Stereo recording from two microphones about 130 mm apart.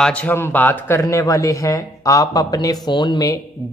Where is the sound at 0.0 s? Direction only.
10° left (ahead or behind).